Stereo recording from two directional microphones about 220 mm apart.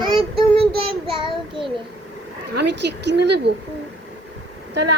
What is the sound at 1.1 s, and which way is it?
Child singing, 20° right (ahead or behind).